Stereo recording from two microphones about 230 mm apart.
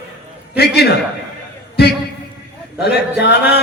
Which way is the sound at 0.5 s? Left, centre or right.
Left.